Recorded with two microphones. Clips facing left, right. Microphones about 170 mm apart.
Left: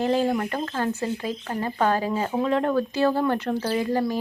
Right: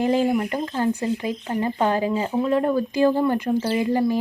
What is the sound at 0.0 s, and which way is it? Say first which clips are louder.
Speech: right 2 dB; 15° right (ahead or behind).